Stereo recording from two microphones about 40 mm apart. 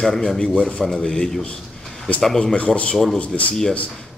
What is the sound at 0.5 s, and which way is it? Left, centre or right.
Speech, left.